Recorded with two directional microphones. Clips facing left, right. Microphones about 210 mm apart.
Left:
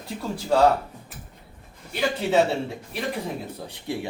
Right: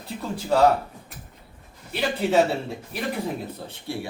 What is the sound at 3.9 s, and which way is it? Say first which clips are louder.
Speech: left 2 dB; 20° left (ahead or behind).